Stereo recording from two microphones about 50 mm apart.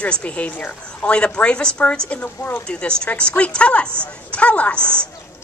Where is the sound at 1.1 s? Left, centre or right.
Left.